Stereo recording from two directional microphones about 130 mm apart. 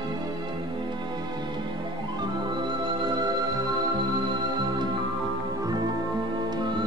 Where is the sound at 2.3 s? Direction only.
35° right (ahead or behind).